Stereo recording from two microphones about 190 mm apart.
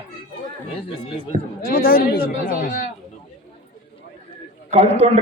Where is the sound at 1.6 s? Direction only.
50° left (ahead or behind).